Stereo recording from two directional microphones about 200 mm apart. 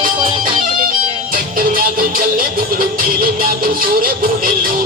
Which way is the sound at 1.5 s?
45° right (ahead or behind).